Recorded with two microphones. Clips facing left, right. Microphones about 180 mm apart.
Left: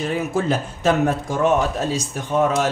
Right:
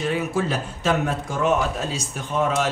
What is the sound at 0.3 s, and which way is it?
A man's voice, 45° left (ahead or behind).